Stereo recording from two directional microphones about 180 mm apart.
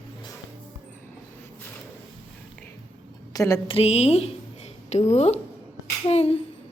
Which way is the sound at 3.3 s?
20° left (ahead or behind).